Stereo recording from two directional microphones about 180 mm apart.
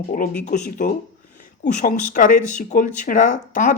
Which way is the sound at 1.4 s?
50° left (ahead or behind).